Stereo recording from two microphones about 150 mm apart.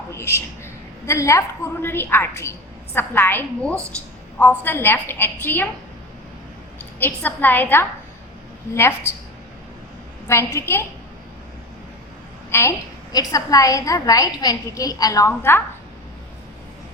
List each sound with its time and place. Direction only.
0.1 s a woman's voice: 15° left (ahead or behind)
7.0 s a woman's voice: 10° left (ahead or behind)
10.2 s a woman's voice: 15° left (ahead or behind)
12.5 s a woman's voice: 15° left (ahead or behind)